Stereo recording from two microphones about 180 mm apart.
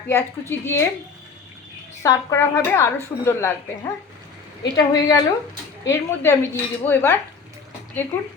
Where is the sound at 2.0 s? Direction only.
15° left (ahead or behind).